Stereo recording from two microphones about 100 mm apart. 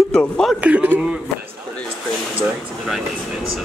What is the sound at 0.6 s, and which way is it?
Speech, 15° right (ahead or behind).